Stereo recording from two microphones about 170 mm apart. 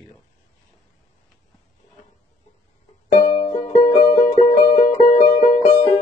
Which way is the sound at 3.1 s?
40° left (ahead or behind).